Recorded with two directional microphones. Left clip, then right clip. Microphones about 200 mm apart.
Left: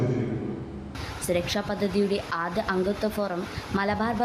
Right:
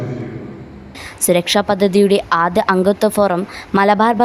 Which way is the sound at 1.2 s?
45° right (ahead or behind).